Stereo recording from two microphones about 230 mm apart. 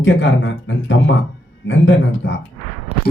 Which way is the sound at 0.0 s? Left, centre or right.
Left.